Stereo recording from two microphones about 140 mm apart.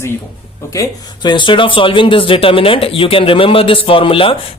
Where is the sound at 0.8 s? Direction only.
35° left (ahead or behind).